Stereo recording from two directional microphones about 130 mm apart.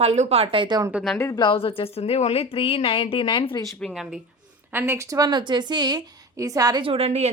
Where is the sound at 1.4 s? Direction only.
45° left (ahead or behind).